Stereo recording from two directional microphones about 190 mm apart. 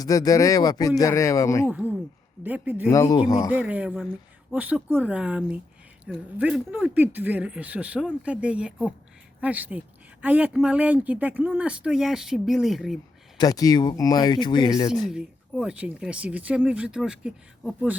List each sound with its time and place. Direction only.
0.0 s speech: 20° left (ahead or behind)
1.7 s speech: 10° right (ahead or behind)
2.9 s speech: 15° left (ahead or behind)
3.5 s speech: 5° right (ahead or behind)
13.4 s speech: 20° left (ahead or behind)
15.0 s speech: 5° right (ahead or behind)